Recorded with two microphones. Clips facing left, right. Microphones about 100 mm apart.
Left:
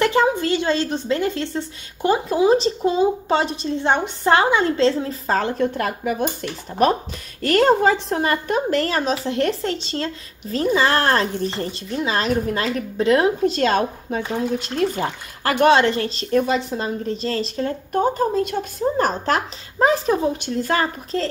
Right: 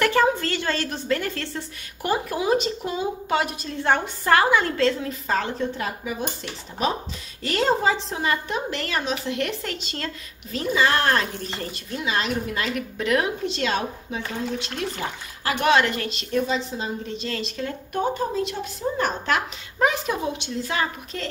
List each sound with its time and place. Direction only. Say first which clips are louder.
0.0 s a woman's voice: left 2 dB; 20° left (ahead or behind); by 5.5 s 35° left (ahead or behind)
5.6 s a woman's voice: left 6 dB; 55° left (ahead or behind)
17.1 s a woman's voice: left 6 dB; 35° left (ahead or behind)
20.4 s speech: left 6 dB; 45° left (ahead or behind)
21.1 s a woman's voice: left 12 dB; 35° left (ahead or behind)